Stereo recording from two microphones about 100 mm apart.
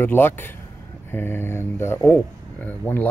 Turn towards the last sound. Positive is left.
turn(degrees=20)  # may be behind; listen again after turning